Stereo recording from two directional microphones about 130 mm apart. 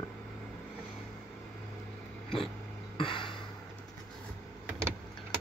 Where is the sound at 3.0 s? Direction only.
40° left (ahead or behind).